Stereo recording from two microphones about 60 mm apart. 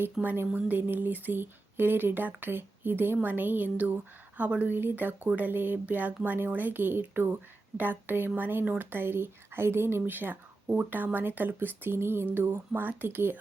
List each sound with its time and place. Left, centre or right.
0.2 s speech: centre
0.5 s speech: right
10.1 s speech: right